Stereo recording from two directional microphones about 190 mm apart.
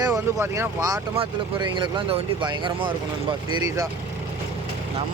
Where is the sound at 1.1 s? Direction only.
25° right (ahead or behind).